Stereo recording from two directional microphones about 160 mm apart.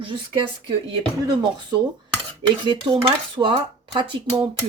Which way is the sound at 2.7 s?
30° right (ahead or behind).